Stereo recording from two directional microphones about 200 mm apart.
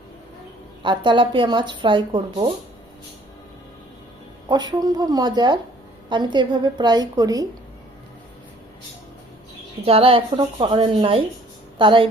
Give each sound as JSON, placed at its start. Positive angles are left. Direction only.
{"t": 0.8, "sound": "speech", "side_deg": -25}
{"t": 4.4, "sound": "speech", "side_deg": -20}
{"t": 9.8, "sound": "speech", "side_deg": -30}